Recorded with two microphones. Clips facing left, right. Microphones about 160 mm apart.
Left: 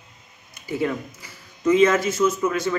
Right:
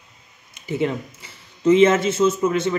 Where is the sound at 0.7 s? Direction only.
25° right (ahead or behind).